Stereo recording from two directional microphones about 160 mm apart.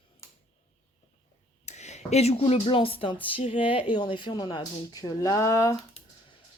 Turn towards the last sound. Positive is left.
turn(degrees=20)  # may be behind; listen again after turning